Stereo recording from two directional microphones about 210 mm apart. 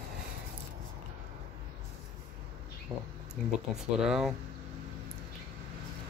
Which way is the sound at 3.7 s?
5° right (ahead or behind).